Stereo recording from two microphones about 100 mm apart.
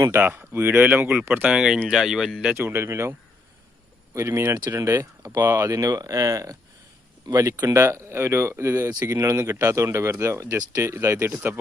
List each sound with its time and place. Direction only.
0.1 s speech: 20° right (ahead or behind)
2.6 s speech: 25° right (ahead or behind)
7.6 s speech: 25° right (ahead or behind)